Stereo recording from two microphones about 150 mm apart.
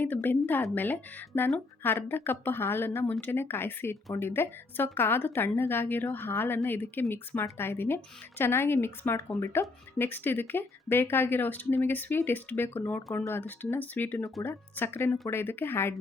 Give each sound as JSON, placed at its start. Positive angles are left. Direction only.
{"t": 0.0, "sound": "speech", "side_deg": 10}